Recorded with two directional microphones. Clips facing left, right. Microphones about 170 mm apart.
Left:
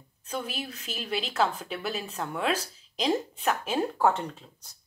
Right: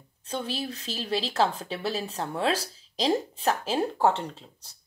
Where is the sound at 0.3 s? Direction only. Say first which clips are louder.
Right 3 dB; 30° right (ahead or behind).